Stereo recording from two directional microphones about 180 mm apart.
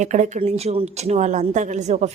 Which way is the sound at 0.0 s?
40° right (ahead or behind).